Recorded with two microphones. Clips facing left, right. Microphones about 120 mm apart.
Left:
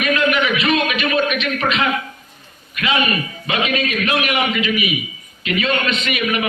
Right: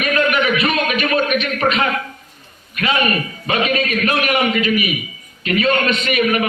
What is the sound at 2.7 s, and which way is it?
A man's voice, 40° right (ahead or behind).